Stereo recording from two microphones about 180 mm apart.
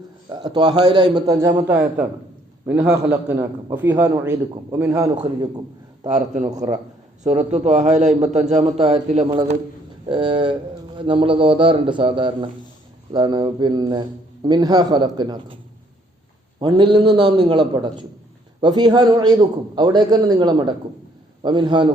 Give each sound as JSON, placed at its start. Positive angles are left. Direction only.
{"t": 0.3, "sound": "a man's voice", "side_deg": -25}
{"t": 6.1, "sound": "a man's voice", "side_deg": -40}
{"t": 16.6, "sound": "a man's voice", "side_deg": -25}